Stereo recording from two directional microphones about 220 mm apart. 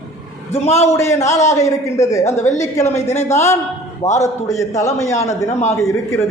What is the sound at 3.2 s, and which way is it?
A man's voice, 10° left (ahead or behind).